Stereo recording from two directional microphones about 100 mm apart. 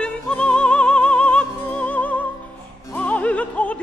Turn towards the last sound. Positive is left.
turn(degrees=15)  # may be behind; listen again after turning